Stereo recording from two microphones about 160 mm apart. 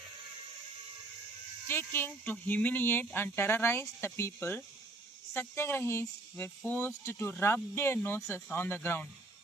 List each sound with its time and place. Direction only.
1.6 s speech: 15° left (ahead or behind)